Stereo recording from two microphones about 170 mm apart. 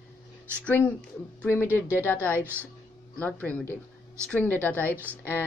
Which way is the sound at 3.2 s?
10° left (ahead or behind).